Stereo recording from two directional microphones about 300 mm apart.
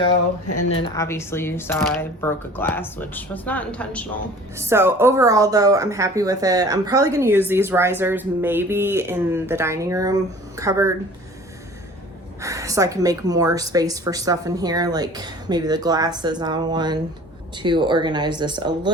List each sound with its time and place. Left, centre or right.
0.8 s speech: centre
4.5 s speech: centre
12.4 s speech: centre